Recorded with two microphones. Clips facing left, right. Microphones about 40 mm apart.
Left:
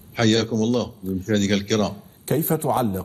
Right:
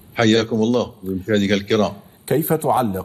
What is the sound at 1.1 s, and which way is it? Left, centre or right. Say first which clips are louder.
A man's voice: right 3 dB; centre.